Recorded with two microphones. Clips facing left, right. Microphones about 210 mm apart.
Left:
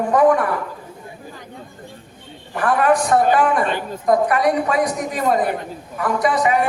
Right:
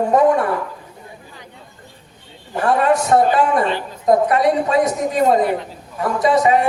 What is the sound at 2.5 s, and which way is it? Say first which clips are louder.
A man's voice: right 1 dB; 25° right (ahead or behind).